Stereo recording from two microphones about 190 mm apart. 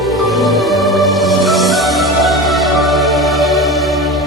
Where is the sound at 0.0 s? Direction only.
Centre (ahead or behind).